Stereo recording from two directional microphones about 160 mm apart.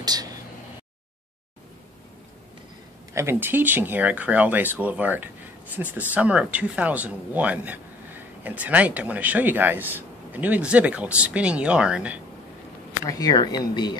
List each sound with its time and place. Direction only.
0.0 s a sound: 25° right (ahead or behind)
3.2 s speech: 15° right (ahead or behind)
13.0 s speech: 25° left (ahead or behind)